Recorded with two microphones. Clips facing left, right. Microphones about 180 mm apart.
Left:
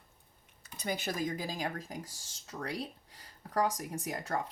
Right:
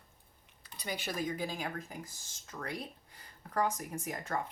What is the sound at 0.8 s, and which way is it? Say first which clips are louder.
Speech: left 2 dB; 40° left (ahead or behind).